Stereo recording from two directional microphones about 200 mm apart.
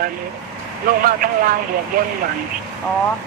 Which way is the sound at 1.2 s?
45° right (ahead or behind).